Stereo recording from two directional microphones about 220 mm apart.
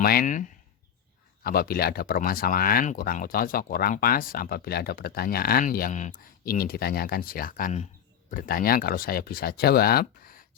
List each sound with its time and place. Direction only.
0.0 s speech: 40° left (ahead or behind)
1.5 s speech: 45° left (ahead or behind)